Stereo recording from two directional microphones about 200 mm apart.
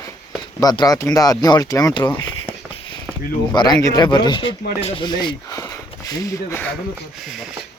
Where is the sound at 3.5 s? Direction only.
20° left (ahead or behind).